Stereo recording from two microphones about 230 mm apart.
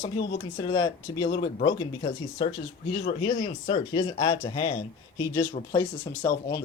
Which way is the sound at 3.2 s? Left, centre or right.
Centre.